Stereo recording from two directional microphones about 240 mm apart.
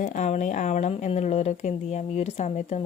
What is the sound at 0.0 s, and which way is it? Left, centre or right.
Speech, left.